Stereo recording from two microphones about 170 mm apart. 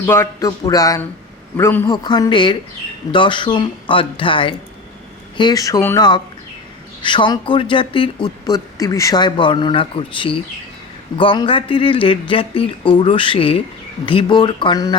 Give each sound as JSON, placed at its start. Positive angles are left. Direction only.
{"t": 0.0, "sound": "a man's voice", "side_deg": 15}
{"t": 2.0, "sound": "speech", "side_deg": 25}
{"t": 7.0, "sound": "speech", "side_deg": 30}